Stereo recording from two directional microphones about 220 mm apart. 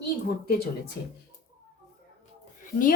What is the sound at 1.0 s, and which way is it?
Speech, 50° left (ahead or behind).